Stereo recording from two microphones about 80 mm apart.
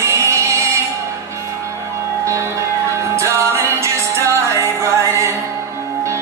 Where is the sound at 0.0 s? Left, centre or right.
Right.